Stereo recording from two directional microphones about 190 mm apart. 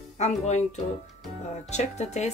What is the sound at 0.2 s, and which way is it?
Speech, 35° left (ahead or behind).